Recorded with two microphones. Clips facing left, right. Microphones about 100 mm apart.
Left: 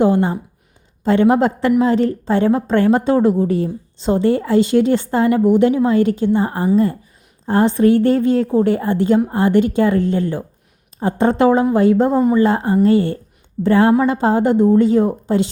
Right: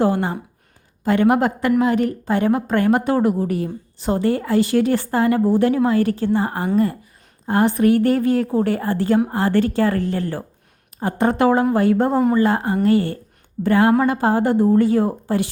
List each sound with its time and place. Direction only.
0.0 s speech: 20° left (ahead or behind)